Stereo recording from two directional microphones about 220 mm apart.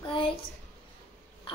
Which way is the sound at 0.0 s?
25° left (ahead or behind).